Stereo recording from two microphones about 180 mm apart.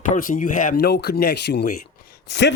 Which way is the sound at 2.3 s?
75° left (ahead or behind).